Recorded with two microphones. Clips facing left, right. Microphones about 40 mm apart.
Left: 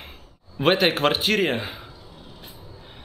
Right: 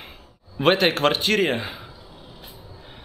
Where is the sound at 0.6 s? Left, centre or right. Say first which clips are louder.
Right 1 dB; centre.